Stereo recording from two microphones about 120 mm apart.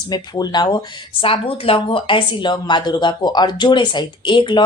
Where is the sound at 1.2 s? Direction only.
50° left (ahead or behind).